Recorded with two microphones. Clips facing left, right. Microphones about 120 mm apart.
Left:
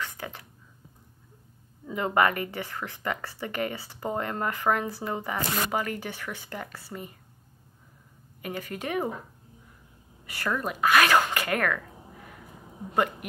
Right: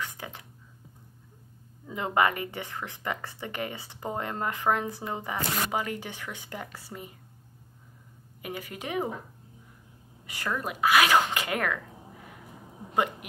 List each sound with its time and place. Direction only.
0.0 s a sound: 15° right (ahead or behind)
2.0 s speech: 20° right (ahead or behind)
8.4 s speech: 10° right (ahead or behind)
10.2 s speech: 15° right (ahead or behind)
12.9 s speech: 15° right (ahead or behind)